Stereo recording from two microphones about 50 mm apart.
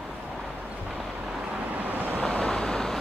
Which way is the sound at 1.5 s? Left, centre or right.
Right.